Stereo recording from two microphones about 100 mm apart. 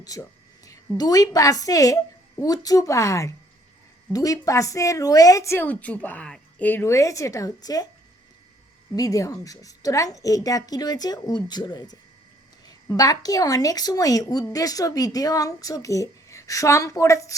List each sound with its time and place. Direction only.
0.0 s a woman's voice: 35° left (ahead or behind)
5.5 s a woman's voice: 15° left (ahead or behind); by 7.9 s 35° left (ahead or behind)
9.0 s a woman's voice: 35° left (ahead or behind)
13.0 s a woman's voice: 40° left (ahead or behind)